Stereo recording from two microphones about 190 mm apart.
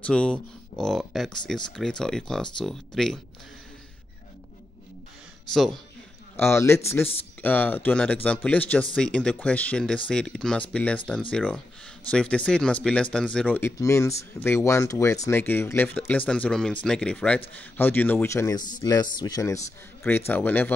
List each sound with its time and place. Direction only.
0.0 s speech: 5° left (ahead or behind)
5.5 s speech: centre (ahead or behind)
6.3 s speech: 15° left (ahead or behind)